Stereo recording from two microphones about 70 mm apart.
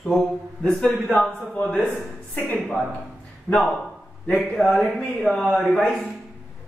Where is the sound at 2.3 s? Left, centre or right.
Left.